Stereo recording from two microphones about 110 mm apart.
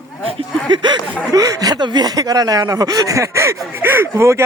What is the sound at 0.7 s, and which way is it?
Speech, 45° right (ahead or behind).